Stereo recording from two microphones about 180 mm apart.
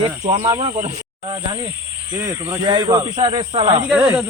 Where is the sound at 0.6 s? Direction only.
40° right (ahead or behind).